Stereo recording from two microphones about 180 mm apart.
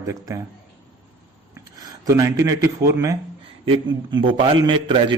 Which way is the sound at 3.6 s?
30° right (ahead or behind).